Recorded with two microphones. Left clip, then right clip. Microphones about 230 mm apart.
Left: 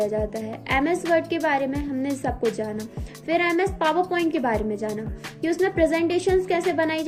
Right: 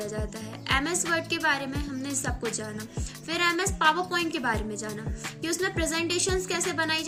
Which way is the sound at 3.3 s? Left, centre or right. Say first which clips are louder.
Left 5 dB; centre.